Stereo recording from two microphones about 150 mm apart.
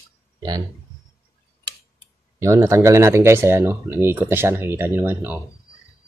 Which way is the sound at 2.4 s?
20° right (ahead or behind).